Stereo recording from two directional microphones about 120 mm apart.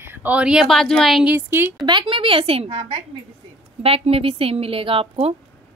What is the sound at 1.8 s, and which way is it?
A woman's voice, 45° right (ahead or behind).